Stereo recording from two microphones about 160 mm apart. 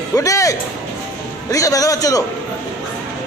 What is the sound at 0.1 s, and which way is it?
A man's voice, 20° left (ahead or behind).